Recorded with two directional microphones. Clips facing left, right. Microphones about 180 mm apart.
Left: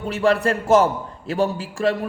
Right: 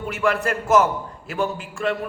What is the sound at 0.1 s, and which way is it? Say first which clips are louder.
A man's voice: left 4 dB; 35° left (ahead or behind).